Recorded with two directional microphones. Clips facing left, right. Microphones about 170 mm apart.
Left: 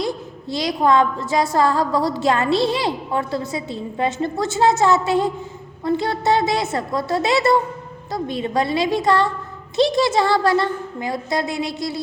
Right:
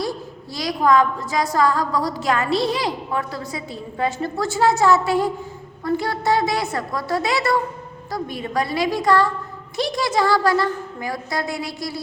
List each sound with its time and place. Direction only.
0.5 s a woman's voice: 25° left (ahead or behind)